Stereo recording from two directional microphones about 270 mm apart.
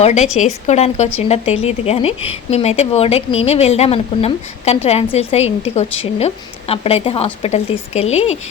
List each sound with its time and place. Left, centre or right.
0.0 s a woman's voice: left